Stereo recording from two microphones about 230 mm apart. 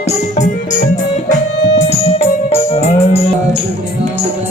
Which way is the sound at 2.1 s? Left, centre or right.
Left.